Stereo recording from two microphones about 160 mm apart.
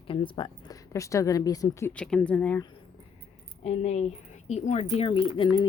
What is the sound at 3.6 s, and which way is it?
Speech, 40° left (ahead or behind).